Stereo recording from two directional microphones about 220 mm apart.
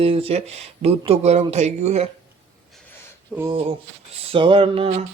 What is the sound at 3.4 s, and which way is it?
Speech, 20° right (ahead or behind).